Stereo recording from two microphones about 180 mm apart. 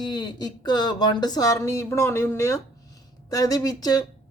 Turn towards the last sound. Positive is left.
turn(degrees=20)  # may be behind; listen again after turning